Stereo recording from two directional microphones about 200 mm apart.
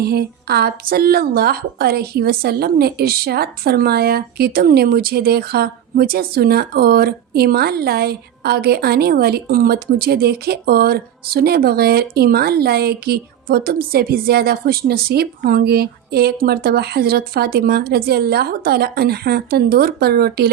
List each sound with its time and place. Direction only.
0.0 s a woman's voice: 50° right (ahead or behind)